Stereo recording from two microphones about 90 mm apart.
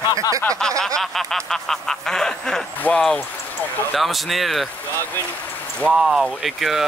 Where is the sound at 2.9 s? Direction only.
20° left (ahead or behind).